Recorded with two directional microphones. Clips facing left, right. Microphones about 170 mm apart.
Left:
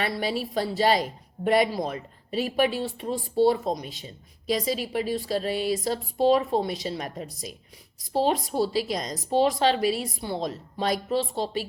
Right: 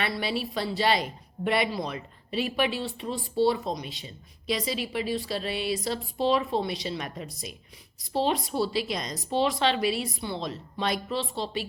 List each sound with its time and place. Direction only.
0.0 s a woman's voice: 45° left (ahead or behind)